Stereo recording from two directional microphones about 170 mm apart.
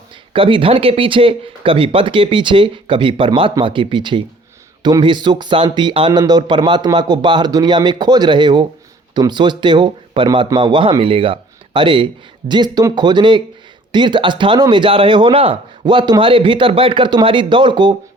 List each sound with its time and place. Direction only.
0.3 s speech: 30° right (ahead or behind)